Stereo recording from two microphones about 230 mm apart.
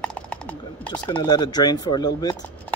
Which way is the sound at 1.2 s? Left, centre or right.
Centre.